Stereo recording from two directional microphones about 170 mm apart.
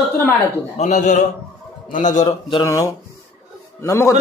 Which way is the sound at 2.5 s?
20° left (ahead or behind).